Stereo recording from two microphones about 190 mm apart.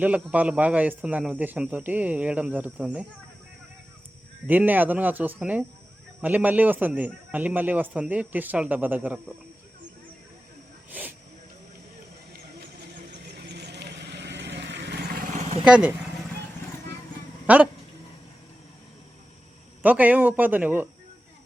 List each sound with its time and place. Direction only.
0.0 s speech: 5° right (ahead or behind)
4.4 s speech: 10° right (ahead or behind)
13.1 s vehicle: 60° right (ahead or behind)
15.6 s speech: 5° right (ahead or behind)
17.4 s speech: 5° right (ahead or behind)
19.8 s speech: 10° right (ahead or behind)